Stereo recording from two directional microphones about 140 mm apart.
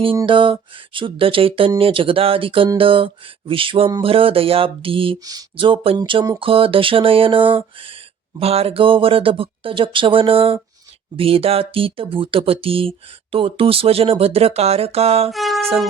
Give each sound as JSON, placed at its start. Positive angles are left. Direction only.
{"t": 0.3, "sound": "speech", "side_deg": -35}
{"t": 5.2, "sound": "speech", "side_deg": -30}
{"t": 15.3, "sound": "music", "side_deg": 0}